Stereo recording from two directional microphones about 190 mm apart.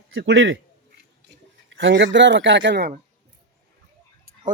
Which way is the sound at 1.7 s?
70° right (ahead or behind).